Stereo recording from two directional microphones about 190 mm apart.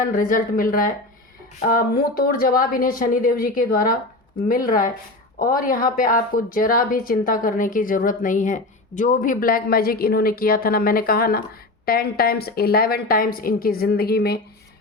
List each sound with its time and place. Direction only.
0.0 s speech: 45° left (ahead or behind)